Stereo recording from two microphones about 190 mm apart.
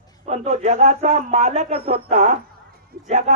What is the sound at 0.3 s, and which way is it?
Speech, 35° right (ahead or behind).